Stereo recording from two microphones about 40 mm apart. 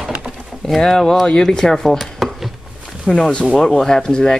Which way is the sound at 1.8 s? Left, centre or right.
Centre.